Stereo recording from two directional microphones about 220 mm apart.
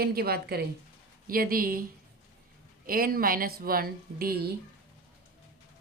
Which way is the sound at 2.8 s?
40° right (ahead or behind).